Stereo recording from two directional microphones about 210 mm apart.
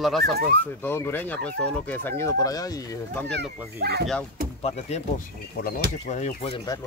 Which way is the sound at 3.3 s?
50° right (ahead or behind).